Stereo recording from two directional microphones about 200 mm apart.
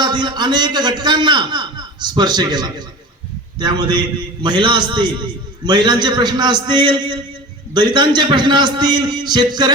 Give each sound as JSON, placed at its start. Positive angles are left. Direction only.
{"t": 0.0, "sound": "a man's voice", "side_deg": -20}